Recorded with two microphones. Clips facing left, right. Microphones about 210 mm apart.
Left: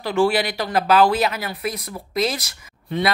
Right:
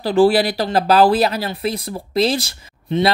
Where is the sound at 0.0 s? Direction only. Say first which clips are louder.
Right 5 dB; 35° right (ahead or behind).